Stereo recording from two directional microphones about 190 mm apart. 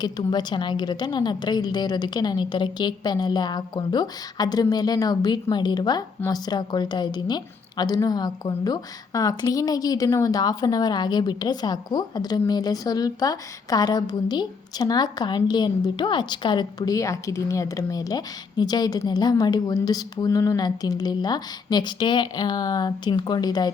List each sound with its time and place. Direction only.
0.0 s a woman's voice: 20° left (ahead or behind)